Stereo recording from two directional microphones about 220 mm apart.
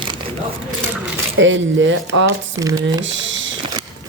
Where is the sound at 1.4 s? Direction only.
60° right (ahead or behind).